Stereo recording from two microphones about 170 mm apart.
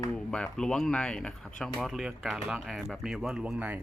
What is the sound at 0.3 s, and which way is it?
Speech, 5° left (ahead or behind).